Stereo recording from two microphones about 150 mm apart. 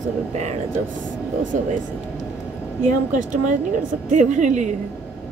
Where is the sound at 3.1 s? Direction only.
55° right (ahead or behind).